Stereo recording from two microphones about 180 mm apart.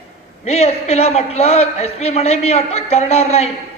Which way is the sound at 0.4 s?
35° left (ahead or behind).